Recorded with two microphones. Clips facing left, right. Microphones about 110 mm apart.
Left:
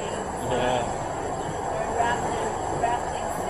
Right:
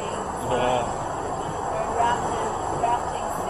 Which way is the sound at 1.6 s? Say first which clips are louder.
Right 2 dB; 30° right (ahead or behind).